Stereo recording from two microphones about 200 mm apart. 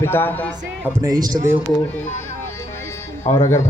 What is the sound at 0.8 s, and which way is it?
Speech, 15° right (ahead or behind).